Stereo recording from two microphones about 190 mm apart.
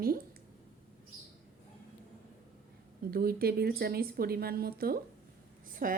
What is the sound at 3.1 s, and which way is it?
A woman's voice, 50° right (ahead or behind).